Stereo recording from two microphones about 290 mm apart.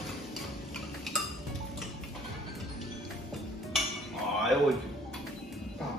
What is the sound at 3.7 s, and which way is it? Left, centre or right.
Dishes, centre.